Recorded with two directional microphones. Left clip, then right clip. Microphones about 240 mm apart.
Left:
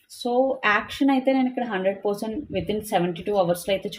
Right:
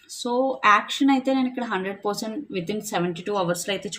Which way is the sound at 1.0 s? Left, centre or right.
Right.